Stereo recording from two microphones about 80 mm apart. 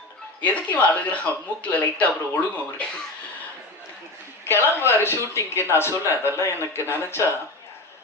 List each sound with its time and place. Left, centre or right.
0.4 s speech: centre
4.4 s a woman's voice: left